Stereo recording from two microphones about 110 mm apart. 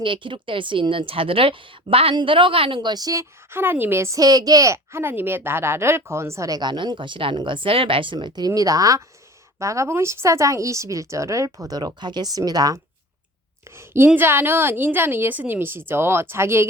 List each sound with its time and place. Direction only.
0.0 s a woman's voice: 50° right (ahead or behind)
13.7 s a woman's voice: 20° right (ahead or behind)